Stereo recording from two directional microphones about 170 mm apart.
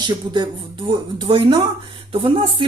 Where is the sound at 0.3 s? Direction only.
25° right (ahead or behind).